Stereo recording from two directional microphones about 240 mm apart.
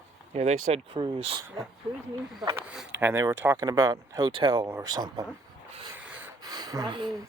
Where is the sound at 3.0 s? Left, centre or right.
Centre.